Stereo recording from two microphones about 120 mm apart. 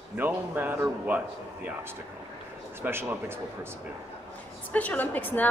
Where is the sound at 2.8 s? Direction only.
20° right (ahead or behind).